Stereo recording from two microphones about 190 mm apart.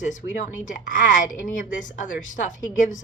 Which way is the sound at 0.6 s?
40° left (ahead or behind).